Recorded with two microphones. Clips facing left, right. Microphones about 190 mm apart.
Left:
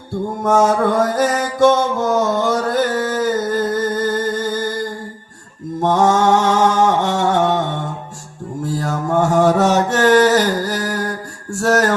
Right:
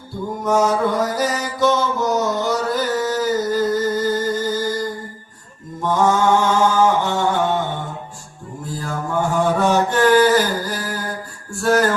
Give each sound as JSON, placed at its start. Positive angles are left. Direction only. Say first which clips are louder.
{"t": 0.4, "sound": "mantra", "louder": "left 3 dB", "side_deg": 50}
{"t": 5.8, "sound": "mantra", "louder": "left 3 dB", "side_deg": 90}